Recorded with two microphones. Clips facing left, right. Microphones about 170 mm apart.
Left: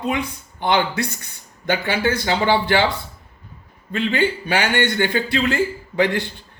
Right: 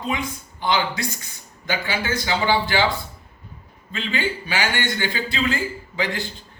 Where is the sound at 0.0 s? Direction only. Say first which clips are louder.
Left 3 dB; 60° left (ahead or behind).